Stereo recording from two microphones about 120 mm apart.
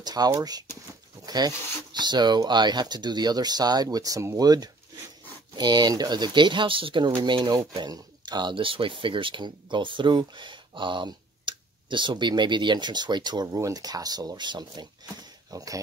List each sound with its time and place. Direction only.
0.0 s speech: 35° right (ahead or behind)
1.2 s rub: 35° right (ahead or behind)
1.9 s speech: 35° right (ahead or behind)